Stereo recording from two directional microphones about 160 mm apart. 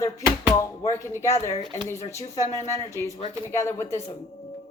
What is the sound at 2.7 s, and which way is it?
A man's voice, 20° left (ahead or behind).